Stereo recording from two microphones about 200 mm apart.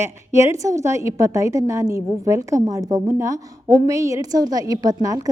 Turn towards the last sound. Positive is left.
turn(degrees=-15)  # may be behind; listen again after turning